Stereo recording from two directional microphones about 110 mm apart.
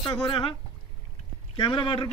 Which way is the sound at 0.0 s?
45° left (ahead or behind).